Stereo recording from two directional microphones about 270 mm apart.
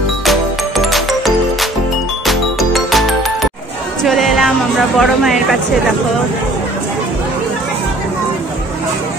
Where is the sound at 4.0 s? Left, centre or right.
Centre.